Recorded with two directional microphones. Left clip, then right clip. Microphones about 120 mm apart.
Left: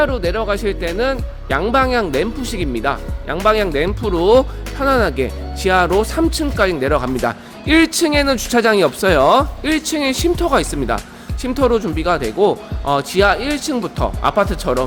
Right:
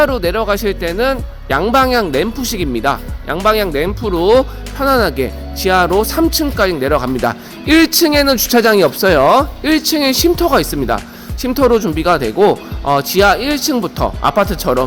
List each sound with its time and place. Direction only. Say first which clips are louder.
0.0 s speech: right 4 dB; 35° right (ahead or behind)
3.4 s speech: right 1 dB; 20° right (ahead or behind); by 12.5 s 40° right (ahead or behind)
12.8 s speech: right 3 dB; 30° right (ahead or behind)